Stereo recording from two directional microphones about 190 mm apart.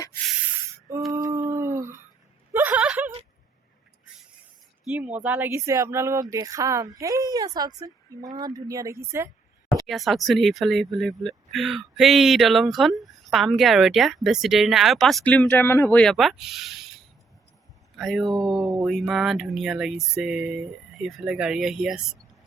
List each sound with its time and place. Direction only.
1.1 s dog: 15° right (ahead or behind)
2.5 s a sound: 10° right (ahead or behind)
4.9 s speech: 5° right (ahead or behind)
9.8 s speech: centre (ahead or behind)
17.9 s speech: centre (ahead or behind)